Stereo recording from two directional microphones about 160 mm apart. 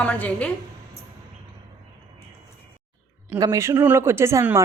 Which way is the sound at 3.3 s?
20° right (ahead or behind).